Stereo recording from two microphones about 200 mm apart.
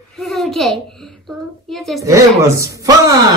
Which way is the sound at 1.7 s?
Centre (ahead or behind).